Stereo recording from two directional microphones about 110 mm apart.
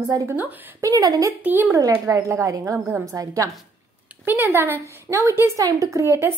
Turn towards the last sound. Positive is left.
turn(degrees=-25)  # may be behind; listen again after turning